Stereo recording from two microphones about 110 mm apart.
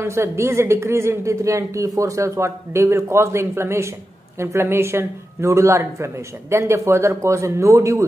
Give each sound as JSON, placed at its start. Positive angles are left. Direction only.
{"t": 0.0, "sound": "a woman's voice", "side_deg": -25}